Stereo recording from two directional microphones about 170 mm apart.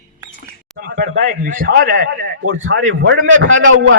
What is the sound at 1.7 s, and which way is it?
Speech, 65° right (ahead or behind).